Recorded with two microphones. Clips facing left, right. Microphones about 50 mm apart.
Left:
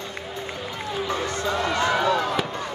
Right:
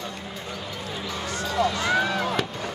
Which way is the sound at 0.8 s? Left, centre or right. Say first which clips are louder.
Left 8 dB; left.